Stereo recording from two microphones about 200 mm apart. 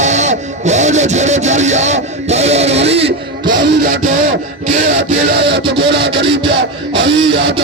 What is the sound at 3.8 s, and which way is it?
Speech, 35° right (ahead or behind).